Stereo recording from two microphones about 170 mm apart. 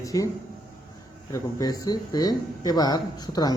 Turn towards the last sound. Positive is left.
turn(degrees=20)  # may be behind; listen again after turning